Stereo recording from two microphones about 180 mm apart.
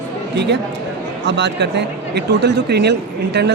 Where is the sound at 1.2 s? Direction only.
75° right (ahead or behind).